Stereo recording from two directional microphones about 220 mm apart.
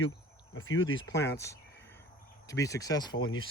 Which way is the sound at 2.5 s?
15° left (ahead or behind).